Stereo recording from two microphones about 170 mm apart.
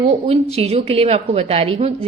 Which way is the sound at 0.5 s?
40° right (ahead or behind).